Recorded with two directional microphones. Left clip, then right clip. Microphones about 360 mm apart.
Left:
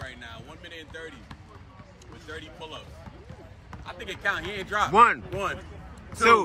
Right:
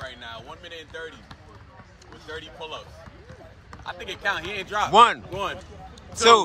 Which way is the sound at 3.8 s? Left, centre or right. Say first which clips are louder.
Right 2 dB; centre.